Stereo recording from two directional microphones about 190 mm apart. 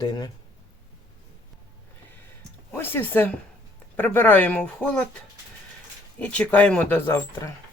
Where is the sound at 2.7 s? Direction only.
10° left (ahead or behind).